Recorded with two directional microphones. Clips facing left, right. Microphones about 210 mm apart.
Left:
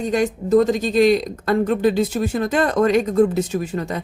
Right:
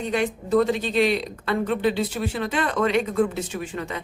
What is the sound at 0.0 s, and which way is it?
A woman's voice, 40° left (ahead or behind).